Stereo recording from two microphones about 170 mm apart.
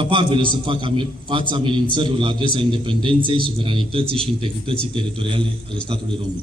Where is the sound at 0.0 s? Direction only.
30° right (ahead or behind).